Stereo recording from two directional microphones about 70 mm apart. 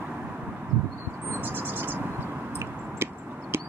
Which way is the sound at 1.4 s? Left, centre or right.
Right.